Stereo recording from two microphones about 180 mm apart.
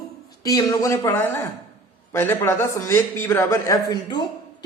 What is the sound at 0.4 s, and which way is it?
A man's voice, 20° left (ahead or behind).